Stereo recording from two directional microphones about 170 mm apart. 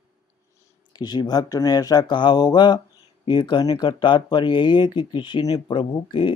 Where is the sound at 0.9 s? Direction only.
25° left (ahead or behind).